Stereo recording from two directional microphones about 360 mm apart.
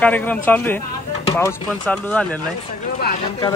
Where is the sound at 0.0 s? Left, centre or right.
Centre.